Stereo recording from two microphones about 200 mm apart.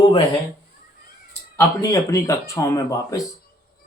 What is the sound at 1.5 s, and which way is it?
A man's voice, 15° left (ahead or behind).